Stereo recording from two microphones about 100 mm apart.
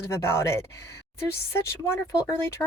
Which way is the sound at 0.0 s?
25° left (ahead or behind).